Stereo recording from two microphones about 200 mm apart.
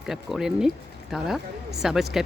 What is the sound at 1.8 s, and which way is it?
Speech, centre (ahead or behind).